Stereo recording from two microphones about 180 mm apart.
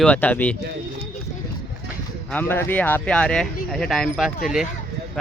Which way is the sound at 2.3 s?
10° left (ahead or behind).